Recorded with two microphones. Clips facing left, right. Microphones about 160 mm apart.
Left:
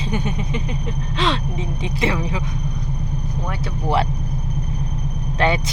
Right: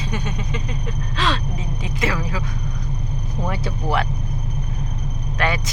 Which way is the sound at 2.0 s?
25° left (ahead or behind).